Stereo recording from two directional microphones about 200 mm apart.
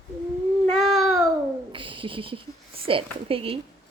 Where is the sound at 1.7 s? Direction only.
25° right (ahead or behind).